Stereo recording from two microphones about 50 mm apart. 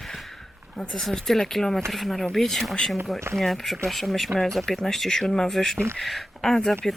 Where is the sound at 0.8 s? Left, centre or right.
Centre.